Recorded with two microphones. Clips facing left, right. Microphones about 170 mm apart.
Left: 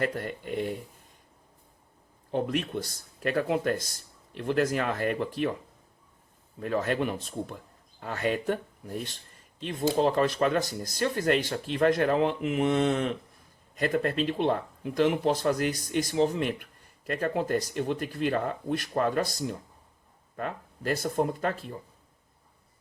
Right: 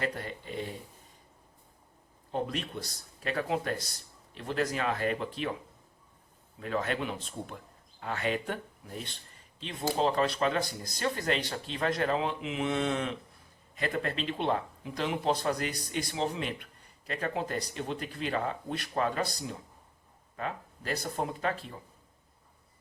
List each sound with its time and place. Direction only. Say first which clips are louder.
0.0 s speech: left 4 dB; 55° left (ahead or behind)
2.3 s speech: left 5 dB; 55° left (ahead or behind)
6.6 s speech: left 4 dB; 45° left (ahead or behind)